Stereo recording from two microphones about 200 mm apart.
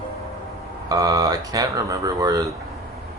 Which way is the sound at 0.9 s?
20° right (ahead or behind).